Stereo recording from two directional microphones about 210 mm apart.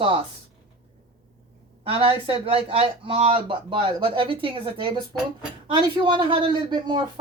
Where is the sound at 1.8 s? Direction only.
25° right (ahead or behind).